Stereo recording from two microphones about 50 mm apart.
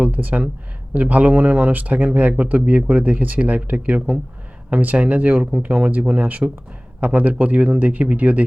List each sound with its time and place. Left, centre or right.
0.0 s speech: right